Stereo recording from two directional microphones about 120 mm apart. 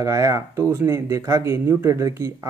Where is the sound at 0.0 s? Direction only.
25° right (ahead or behind).